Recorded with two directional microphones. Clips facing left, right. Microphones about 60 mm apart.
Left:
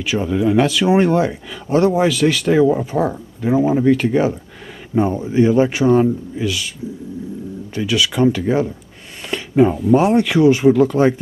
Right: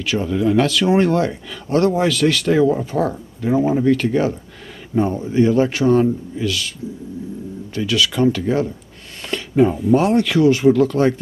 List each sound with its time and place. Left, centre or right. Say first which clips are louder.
0.0 s speech: left 1 dB; centre
7.7 s speech: left 1 dB; centre
9.2 s a sound: left 1 dB; centre
9.9 s speech: left 2 dB; centre